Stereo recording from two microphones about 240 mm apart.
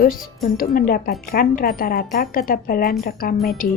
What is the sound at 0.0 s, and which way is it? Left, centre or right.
Speech, left.